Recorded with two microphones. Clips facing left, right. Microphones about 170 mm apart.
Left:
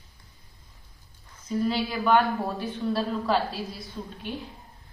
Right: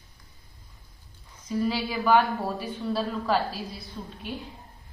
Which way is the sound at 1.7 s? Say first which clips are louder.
Even; 5° right (ahead or behind).